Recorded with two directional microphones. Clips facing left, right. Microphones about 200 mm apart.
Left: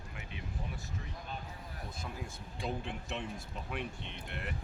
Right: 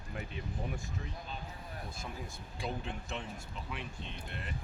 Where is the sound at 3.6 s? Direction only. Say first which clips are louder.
Left 4 dB; 60° left (ahead or behind).